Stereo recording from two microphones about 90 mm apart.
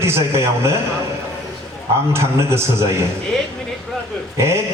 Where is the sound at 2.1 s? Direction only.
30° right (ahead or behind).